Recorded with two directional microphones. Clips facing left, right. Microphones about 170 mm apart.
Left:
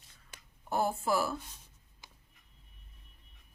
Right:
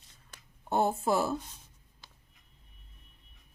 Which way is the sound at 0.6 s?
20° right (ahead or behind).